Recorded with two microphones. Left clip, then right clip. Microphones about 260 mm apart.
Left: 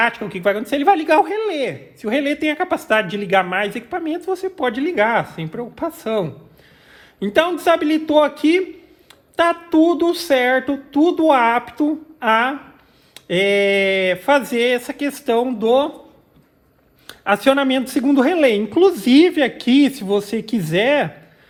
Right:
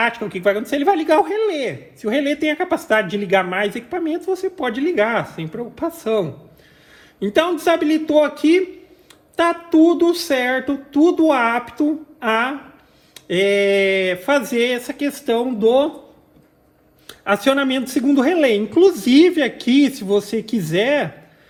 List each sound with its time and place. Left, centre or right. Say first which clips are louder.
0.0 s a man's voice: even; left
17.1 s a man's voice: left 2 dB; left